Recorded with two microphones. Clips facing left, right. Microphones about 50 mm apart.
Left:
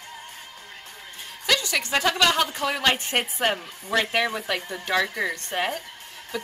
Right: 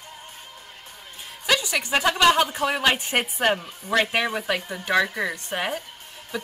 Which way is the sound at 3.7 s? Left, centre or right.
Right.